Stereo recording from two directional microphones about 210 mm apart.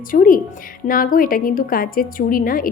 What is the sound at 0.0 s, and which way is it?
A woman's voice, 40° left (ahead or behind).